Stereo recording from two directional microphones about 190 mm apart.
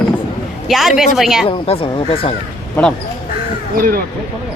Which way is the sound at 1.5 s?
30° left (ahead or behind).